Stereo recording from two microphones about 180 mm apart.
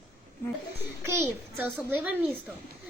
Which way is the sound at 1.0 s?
15° right (ahead or behind).